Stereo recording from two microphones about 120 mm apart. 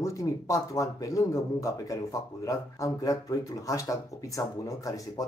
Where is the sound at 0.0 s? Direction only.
25° left (ahead or behind).